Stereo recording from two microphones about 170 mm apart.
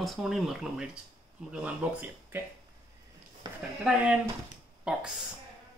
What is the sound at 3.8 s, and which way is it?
Speech, 5° right (ahead or behind).